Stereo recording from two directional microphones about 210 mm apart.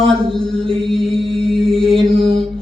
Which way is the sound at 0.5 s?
25° right (ahead or behind).